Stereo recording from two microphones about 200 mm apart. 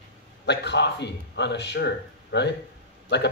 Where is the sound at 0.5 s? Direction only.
60° left (ahead or behind).